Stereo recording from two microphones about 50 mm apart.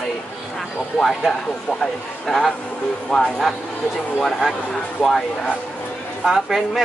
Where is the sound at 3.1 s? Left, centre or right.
Centre.